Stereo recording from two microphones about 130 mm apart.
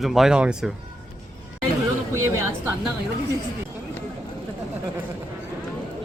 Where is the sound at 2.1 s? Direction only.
20° right (ahead or behind).